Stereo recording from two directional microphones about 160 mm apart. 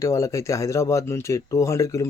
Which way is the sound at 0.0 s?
20° left (ahead or behind).